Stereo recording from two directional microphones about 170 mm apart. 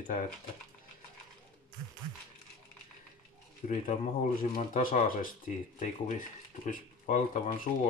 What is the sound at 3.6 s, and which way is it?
Speech, 50° left (ahead or behind).